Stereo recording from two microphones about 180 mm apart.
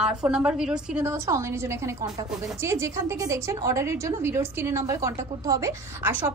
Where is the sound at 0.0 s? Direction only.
5° right (ahead or behind).